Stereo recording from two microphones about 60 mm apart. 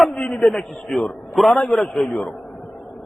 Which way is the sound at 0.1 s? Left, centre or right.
Centre.